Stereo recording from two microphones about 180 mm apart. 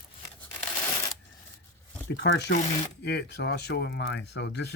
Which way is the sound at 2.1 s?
70° left (ahead or behind).